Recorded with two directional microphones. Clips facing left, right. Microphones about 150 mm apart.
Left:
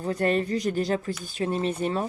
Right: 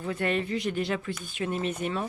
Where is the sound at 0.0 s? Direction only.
40° left (ahead or behind).